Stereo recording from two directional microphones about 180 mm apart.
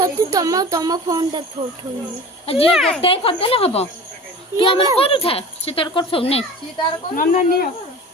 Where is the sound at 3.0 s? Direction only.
30° left (ahead or behind).